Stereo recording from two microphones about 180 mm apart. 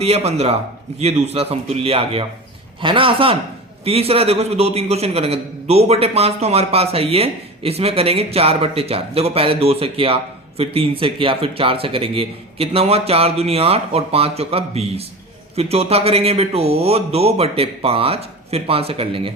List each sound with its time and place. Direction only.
0.0 s a man's voice: 35° right (ahead or behind)